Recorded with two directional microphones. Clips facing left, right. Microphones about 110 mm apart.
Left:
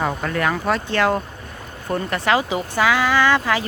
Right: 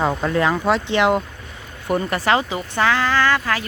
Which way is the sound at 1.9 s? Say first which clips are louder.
Right 1 dB; centre (ahead or behind).